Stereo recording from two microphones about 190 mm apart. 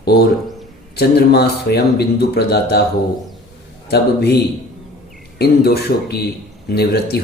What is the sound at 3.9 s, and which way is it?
Speech, 60° left (ahead or behind).